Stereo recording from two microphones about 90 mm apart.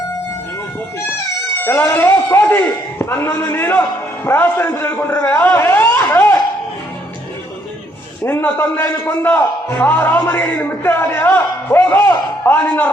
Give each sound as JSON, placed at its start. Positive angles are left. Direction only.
{"t": 1.6, "sound": "a man's voice", "side_deg": 25}
{"t": 8.2, "sound": "a man's voice", "side_deg": 20}